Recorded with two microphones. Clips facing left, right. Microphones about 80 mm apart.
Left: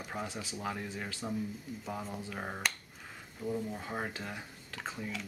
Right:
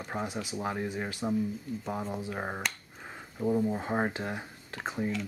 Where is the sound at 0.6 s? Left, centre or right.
Right.